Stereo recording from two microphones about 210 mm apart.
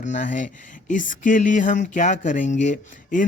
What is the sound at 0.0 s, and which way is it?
Speech, 35° left (ahead or behind).